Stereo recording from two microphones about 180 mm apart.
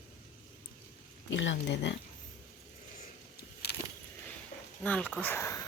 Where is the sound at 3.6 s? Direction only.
60° left (ahead or behind).